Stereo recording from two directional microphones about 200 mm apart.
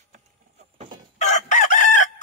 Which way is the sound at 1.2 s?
35° left (ahead or behind).